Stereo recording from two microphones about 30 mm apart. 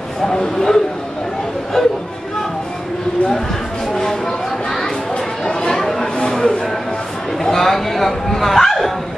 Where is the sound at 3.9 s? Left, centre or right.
Centre.